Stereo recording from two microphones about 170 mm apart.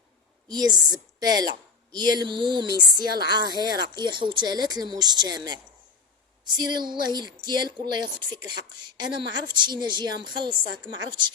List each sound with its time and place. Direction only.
0.4 s a woman's voice: 25° right (ahead or behind)
6.4 s a woman's voice: 25° right (ahead or behind)